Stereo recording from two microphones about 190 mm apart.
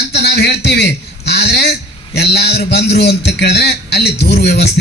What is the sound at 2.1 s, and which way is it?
A man's voice, 60° left (ahead or behind).